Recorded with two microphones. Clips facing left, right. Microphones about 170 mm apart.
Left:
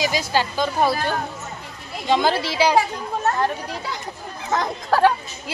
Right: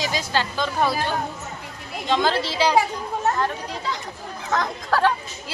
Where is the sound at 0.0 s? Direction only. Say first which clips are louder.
Left 3 dB; 10° left (ahead or behind).